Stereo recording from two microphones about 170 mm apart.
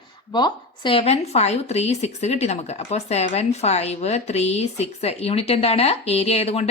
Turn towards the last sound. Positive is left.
turn(degrees=35)  # may be behind; listen again after turning